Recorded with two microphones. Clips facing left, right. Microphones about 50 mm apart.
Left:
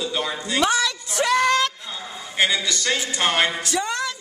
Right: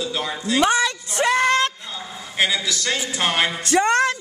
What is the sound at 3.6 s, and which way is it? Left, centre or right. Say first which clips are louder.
Speech: right 7 dB; right.